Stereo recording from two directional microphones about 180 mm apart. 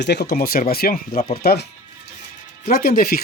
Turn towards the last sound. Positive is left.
turn(degrees=55)  # may be behind; listen again after turning